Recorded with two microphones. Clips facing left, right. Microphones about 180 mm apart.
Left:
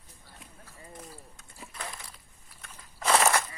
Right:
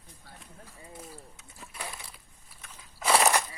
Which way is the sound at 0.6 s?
10° right (ahead or behind).